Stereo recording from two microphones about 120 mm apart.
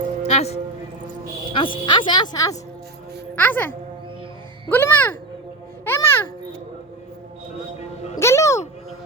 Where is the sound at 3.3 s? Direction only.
15° left (ahead or behind).